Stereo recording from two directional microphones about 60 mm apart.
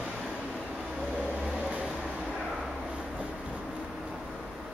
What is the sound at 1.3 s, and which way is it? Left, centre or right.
Vehicle, centre.